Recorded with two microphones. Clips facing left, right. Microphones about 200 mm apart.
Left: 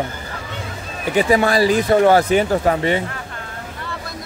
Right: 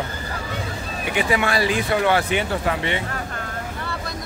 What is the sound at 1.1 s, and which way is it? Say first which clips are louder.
Speech: left 6 dB; 40° left (ahead or behind).